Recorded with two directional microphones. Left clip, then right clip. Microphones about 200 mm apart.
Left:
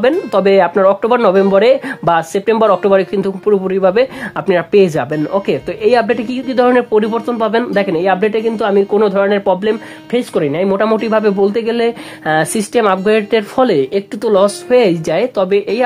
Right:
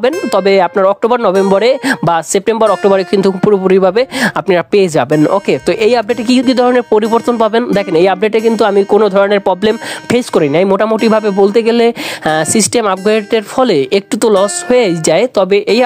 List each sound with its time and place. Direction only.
0.0 s speech: 40° right (ahead or behind); by 13.7 s 25° right (ahead or behind)
13.7 s speech: 35° right (ahead or behind)